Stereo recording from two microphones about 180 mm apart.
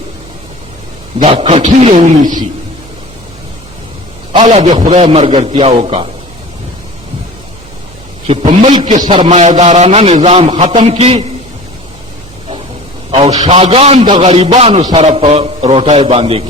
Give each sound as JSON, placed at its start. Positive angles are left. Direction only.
{"t": 1.2, "sound": "a man's voice", "side_deg": -35}
{"t": 4.3, "sound": "a man's voice", "side_deg": -35}
{"t": 8.3, "sound": "a man's voice", "side_deg": -35}
{"t": 13.1, "sound": "a man's voice", "side_deg": -35}